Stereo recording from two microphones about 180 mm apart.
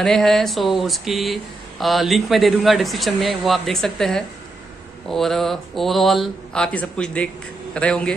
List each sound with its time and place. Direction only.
0.0 s speech: centre (ahead or behind)